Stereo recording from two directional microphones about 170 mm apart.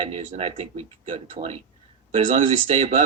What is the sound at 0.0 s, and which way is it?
Speech, 35° right (ahead or behind).